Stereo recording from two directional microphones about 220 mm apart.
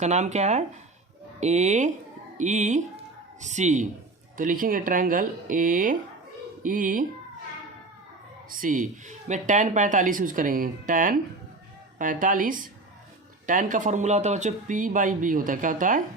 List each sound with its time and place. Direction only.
0.0 s speech: 30° right (ahead or behind)
8.4 s speech: 40° right (ahead or behind)